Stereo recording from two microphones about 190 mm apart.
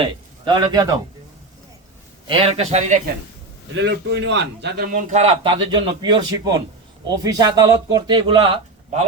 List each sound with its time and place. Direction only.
0.0 s speech: 25° right (ahead or behind)
2.2 s a man's voice: 30° right (ahead or behind)
3.8 s a man's voice: 70° right (ahead or behind); by 5.2 s 45° right (ahead or behind)
5.2 s a man's voice: 30° right (ahead or behind)